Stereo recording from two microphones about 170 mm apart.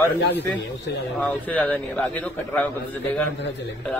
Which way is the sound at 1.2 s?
10° left (ahead or behind).